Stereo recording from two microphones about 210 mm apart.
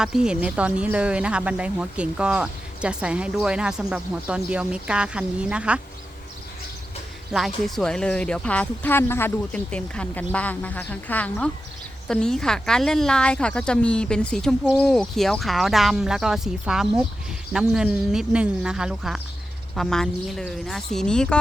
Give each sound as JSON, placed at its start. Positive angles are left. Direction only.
{"t": 0.0, "sound": "speech", "side_deg": -5}
{"t": 7.3, "sound": "speech", "side_deg": 0}